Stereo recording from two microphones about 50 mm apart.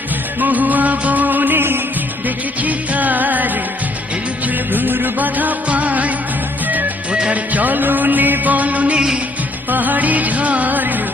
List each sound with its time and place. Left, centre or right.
0.3 s music: right
2.2 s music: right
4.7 s music: right
7.1 s music: right